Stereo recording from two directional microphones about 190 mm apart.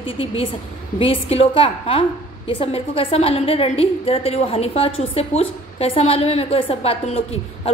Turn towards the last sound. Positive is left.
turn(degrees=30)  # may be behind; listen again after turning